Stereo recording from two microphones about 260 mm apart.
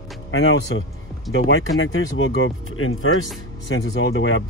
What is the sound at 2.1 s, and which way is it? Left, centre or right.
Speech, left.